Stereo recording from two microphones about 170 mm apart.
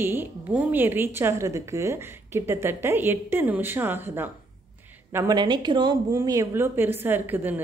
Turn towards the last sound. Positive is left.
turn(degrees=-10)  # may be behind; listen again after turning